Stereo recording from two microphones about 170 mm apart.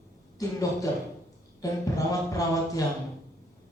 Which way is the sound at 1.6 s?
20° left (ahead or behind).